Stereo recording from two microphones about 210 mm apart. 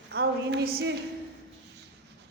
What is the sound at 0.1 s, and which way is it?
Speech, 50° right (ahead or behind).